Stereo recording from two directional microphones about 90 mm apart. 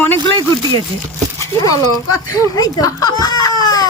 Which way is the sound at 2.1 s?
40° left (ahead or behind).